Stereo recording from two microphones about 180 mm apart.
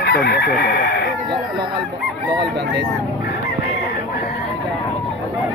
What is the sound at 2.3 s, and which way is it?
Speech, 70° right (ahead or behind).